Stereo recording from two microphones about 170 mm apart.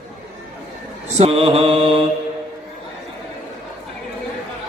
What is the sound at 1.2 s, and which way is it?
Mantra, 35° right (ahead or behind).